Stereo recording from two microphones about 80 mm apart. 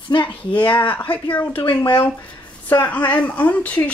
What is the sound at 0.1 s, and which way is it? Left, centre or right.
Speech, left.